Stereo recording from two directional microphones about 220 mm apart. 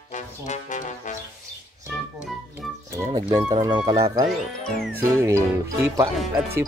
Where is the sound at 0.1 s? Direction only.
35° left (ahead or behind).